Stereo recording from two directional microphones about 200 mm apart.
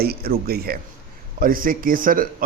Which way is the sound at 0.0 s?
50° right (ahead or behind).